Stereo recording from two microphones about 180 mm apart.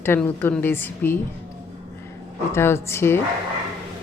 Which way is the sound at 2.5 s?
15° left (ahead or behind).